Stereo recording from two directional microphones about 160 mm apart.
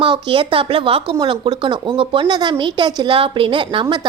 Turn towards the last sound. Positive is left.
turn(degrees=-30)  # may be behind; listen again after turning